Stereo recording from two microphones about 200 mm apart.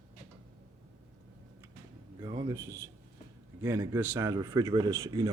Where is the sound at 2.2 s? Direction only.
20° right (ahead or behind).